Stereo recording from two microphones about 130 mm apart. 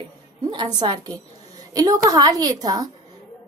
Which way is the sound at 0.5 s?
35° right (ahead or behind).